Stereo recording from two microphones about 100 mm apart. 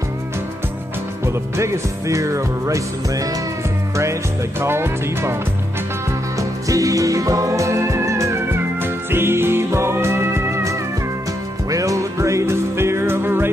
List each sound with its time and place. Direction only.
1.2 s music: 30° right (ahead or behind)